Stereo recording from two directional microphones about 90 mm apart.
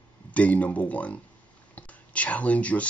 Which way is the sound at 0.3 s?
15° left (ahead or behind).